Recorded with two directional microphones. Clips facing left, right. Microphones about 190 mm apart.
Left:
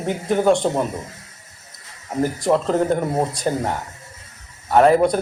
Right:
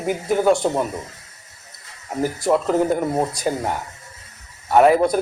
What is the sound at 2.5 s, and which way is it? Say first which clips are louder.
A man's voice: even; 5° right (ahead or behind).